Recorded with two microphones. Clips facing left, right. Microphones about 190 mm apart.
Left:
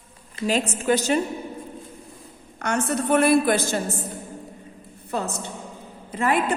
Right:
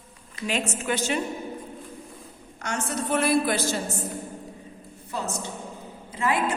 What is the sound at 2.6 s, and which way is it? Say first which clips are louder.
A woman's voice: left 5 dB; 55° left (ahead or behind).